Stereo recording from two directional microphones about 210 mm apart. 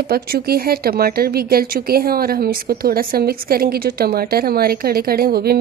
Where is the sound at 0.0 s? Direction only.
45° right (ahead or behind).